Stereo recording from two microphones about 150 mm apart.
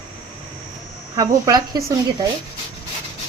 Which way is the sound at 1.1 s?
25° right (ahead or behind).